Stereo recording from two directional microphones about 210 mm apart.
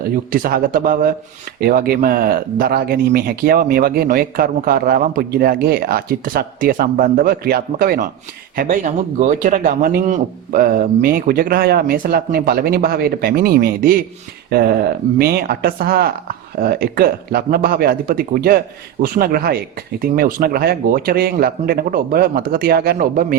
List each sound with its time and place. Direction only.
0.3 s speech: 40° right (ahead or behind)
15.2 s speech: 45° right (ahead or behind)